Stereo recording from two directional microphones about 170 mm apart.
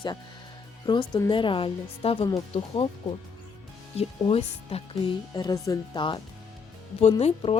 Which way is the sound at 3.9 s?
35° left (ahead or behind).